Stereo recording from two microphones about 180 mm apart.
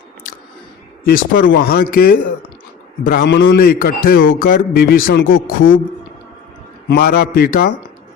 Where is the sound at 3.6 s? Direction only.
55° left (ahead or behind).